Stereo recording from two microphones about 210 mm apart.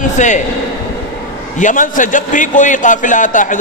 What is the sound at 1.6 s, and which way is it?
A man's voice, 40° left (ahead or behind).